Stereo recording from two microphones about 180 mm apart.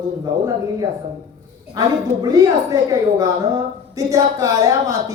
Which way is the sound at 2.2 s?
20° right (ahead or behind).